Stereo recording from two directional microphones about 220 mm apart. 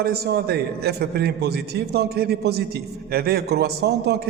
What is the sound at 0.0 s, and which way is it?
A man's voice, 45° right (ahead or behind).